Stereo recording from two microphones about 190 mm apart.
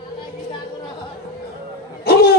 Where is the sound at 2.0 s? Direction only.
55° left (ahead or behind).